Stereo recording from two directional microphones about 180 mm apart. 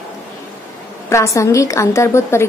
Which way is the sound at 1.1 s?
15° left (ahead or behind).